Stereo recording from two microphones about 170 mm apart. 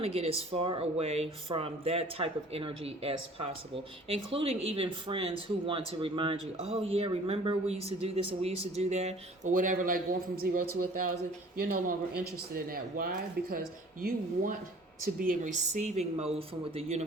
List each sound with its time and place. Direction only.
0.0 s speech: 35° right (ahead or behind); by 13.6 s 60° right (ahead or behind)
15.0 s a woman's voice: 55° right (ahead or behind); by 16.3 s 40° right (ahead or behind)